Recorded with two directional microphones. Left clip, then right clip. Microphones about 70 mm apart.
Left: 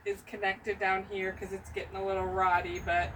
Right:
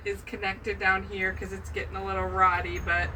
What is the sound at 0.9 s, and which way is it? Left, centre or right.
Speech, centre.